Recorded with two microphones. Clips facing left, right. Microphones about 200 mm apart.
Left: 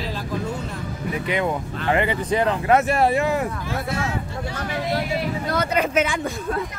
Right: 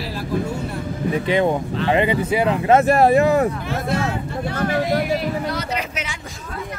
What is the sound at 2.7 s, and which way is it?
Speech, 35° right (ahead or behind).